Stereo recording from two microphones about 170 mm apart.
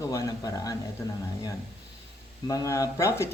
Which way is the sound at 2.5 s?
20° left (ahead or behind).